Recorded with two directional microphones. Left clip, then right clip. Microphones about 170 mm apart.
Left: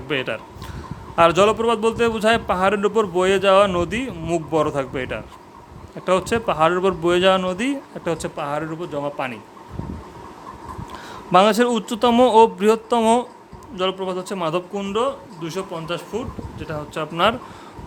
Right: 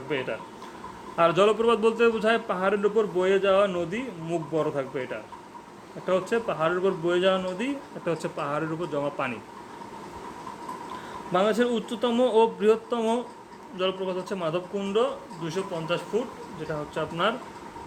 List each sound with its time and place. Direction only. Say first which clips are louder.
0.1 s a man's voice: left 6 dB; 45° left (ahead or behind)
8.0 s speech: left 4 dB; 30° left (ahead or behind)
11.3 s a man's voice: left 9 dB; 45° left (ahead or behind)